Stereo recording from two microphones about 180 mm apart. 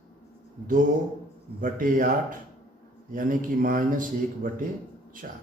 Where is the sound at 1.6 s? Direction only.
50° right (ahead or behind).